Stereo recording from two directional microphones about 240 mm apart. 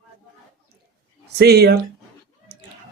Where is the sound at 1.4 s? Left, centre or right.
Right.